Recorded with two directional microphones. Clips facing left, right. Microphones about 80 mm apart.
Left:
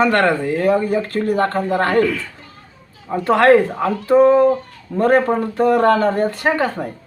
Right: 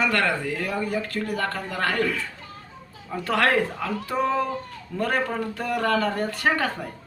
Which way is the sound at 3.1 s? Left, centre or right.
Left.